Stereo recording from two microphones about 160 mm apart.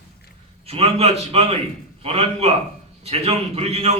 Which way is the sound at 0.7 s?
40° right (ahead or behind).